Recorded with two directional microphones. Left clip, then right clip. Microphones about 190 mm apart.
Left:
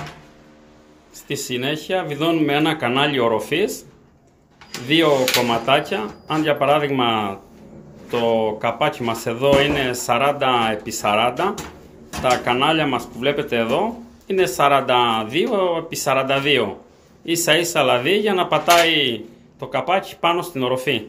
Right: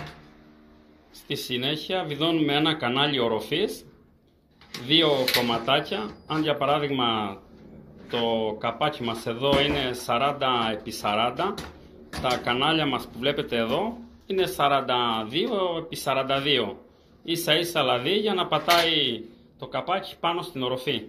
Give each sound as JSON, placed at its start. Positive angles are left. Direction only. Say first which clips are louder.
{"t": 1.5, "sound": "speech", "louder": "left 5 dB", "side_deg": 5}
{"t": 4.8, "sound": "speech", "louder": "left 5 dB", "side_deg": 10}